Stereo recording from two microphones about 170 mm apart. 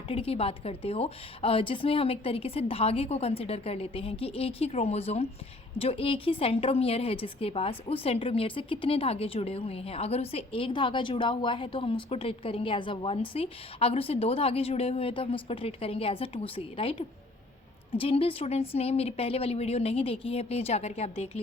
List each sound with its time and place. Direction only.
0.1 s a woman's voice: 35° left (ahead or behind)